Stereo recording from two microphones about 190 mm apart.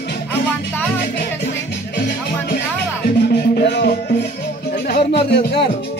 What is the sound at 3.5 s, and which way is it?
Music, 60° left (ahead or behind).